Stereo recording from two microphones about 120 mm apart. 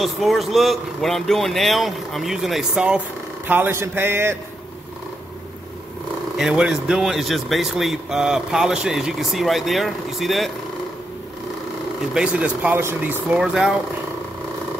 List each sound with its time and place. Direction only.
0.0 s a man's voice: centre (ahead or behind); by 4.4 s 20° right (ahead or behind)
6.3 s speech: 5° right (ahead or behind)
12.1 s speech: 5° right (ahead or behind)
13.4 s speech: 5° right (ahead or behind)